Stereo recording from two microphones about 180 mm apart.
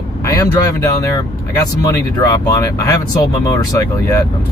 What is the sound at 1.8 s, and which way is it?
Speech, 20° left (ahead or behind).